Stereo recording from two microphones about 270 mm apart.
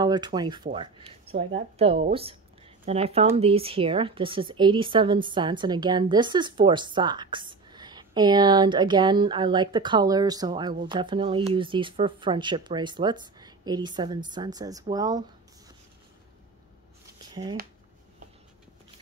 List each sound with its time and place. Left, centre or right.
0.0 s a woman's voice: centre
17.3 s shuffling cards: centre